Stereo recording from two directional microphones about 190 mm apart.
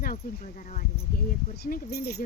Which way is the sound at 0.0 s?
45° left (ahead or behind).